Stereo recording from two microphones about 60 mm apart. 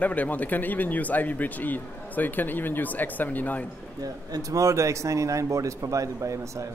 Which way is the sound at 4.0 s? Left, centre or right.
Right.